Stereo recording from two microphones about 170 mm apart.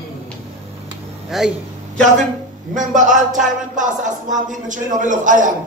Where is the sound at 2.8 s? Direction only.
50° right (ahead or behind).